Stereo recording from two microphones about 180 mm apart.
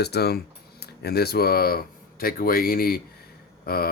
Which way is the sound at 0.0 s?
65° left (ahead or behind).